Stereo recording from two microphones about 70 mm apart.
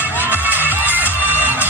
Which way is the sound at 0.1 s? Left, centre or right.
Right.